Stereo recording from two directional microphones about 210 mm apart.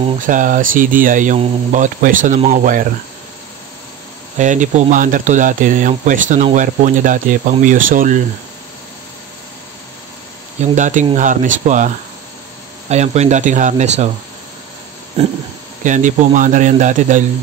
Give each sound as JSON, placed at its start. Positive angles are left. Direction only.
{"t": 0.2, "sound": "speech", "side_deg": -40}
{"t": 4.4, "sound": "speech", "side_deg": -35}
{"t": 10.6, "sound": "speech", "side_deg": -35}
{"t": 15.2, "sound": "a sound", "side_deg": -30}
{"t": 15.8, "sound": "speech", "side_deg": -35}